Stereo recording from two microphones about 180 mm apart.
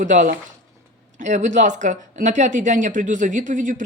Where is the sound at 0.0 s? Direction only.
45° right (ahead or behind).